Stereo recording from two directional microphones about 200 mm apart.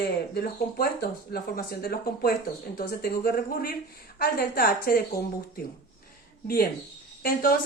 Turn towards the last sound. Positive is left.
turn(degrees=45)  # may be behind; listen again after turning